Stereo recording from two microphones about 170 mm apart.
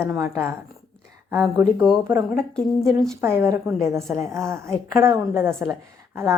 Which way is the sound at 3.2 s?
15° right (ahead or behind).